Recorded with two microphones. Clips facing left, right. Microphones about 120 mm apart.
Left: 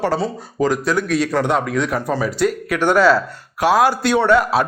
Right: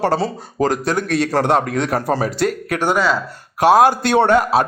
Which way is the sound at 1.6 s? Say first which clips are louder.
Right 1 dB; 55° right (ahead or behind).